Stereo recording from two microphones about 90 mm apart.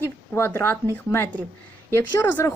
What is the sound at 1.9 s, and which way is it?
Speech, 30° left (ahead or behind).